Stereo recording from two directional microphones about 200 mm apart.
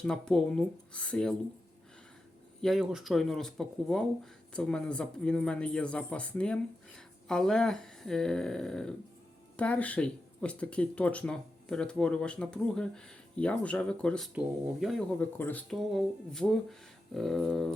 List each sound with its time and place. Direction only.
0.0 s speech: 5° left (ahead or behind)
2.6 s speech: centre (ahead or behind)